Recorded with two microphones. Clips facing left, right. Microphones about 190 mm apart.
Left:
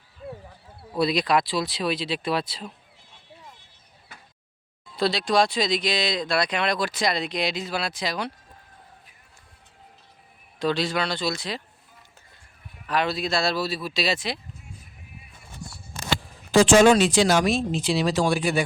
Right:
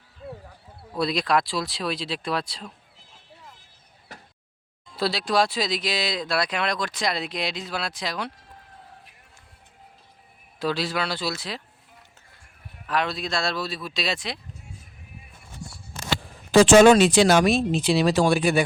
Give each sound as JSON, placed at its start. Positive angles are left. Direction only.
{"t": 0.8, "sound": "speech", "side_deg": 0}
{"t": 4.9, "sound": "speech", "side_deg": -5}
{"t": 10.6, "sound": "speech", "side_deg": -5}
{"t": 12.9, "sound": "speech", "side_deg": 0}
{"t": 16.5, "sound": "speech", "side_deg": -60}